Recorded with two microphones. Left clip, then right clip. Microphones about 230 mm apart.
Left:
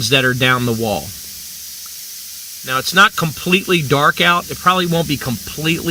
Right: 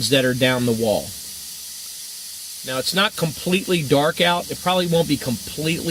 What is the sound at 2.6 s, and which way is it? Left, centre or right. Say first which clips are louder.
Speech: left 8 dB; left.